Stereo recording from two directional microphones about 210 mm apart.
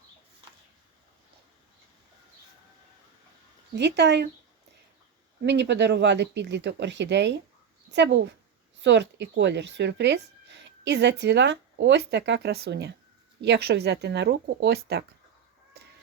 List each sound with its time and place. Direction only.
3.8 s speech: 55° right (ahead or behind)
5.5 s speech: 55° right (ahead or behind)